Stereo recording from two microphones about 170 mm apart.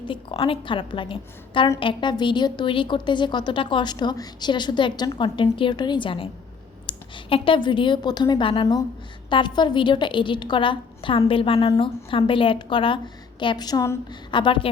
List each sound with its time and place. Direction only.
0.1 s a woman's voice: 30° left (ahead or behind)